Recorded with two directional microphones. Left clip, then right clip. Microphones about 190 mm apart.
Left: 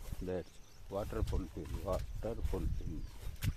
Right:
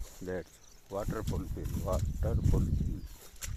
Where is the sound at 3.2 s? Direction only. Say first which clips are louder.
Right 1 dB; 55° right (ahead or behind).